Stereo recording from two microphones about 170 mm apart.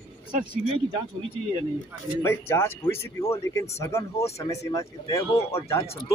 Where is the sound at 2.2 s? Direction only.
15° left (ahead or behind).